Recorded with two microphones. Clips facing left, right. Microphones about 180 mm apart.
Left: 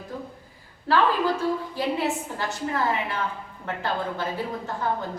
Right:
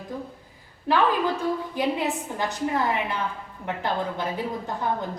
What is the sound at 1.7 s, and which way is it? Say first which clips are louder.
A woman's voice: even; 15° right (ahead or behind).